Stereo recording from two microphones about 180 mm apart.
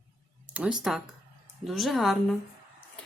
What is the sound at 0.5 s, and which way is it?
Speech, 5° right (ahead or behind).